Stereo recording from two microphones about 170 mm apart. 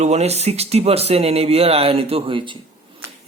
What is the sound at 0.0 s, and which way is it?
Speech, 40° right (ahead or behind).